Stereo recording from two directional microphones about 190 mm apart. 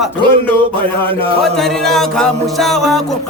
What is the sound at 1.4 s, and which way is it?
Music, centre (ahead or behind).